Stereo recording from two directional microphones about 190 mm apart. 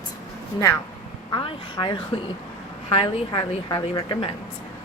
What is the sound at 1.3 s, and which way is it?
A woman's voice, 25° left (ahead or behind).